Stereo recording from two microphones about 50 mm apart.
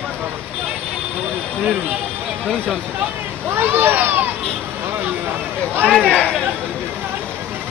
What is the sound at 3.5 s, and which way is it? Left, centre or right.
Speech, right.